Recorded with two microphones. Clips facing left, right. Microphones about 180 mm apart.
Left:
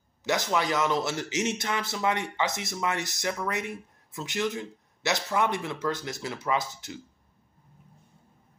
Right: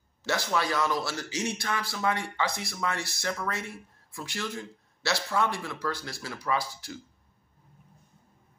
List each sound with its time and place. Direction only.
0.2 s a man's voice: 15° left (ahead or behind)